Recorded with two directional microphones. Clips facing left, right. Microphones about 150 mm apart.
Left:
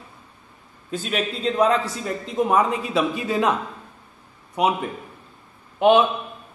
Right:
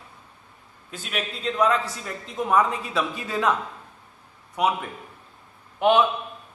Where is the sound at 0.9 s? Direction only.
30° left (ahead or behind).